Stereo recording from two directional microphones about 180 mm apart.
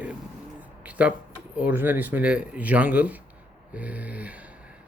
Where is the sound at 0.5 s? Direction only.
10° right (ahead or behind).